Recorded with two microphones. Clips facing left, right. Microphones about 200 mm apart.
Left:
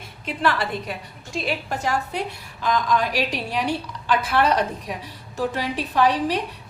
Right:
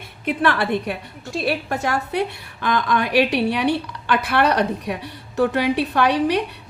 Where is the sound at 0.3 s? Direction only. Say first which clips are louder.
Right 4 dB; 60° right (ahead or behind).